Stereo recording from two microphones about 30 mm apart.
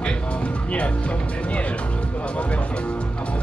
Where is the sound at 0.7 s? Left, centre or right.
Left.